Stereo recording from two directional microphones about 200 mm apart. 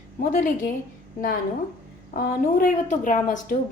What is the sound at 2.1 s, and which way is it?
A woman's voice, 45° left (ahead or behind).